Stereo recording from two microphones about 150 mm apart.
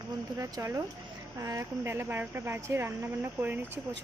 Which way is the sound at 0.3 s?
20° right (ahead or behind).